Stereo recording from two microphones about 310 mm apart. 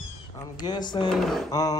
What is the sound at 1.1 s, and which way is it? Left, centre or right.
Speech, centre.